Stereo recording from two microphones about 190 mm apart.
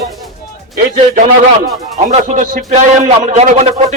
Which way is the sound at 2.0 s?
40° right (ahead or behind).